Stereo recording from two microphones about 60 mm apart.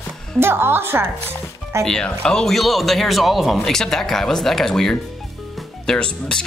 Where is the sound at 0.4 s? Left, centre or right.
Right.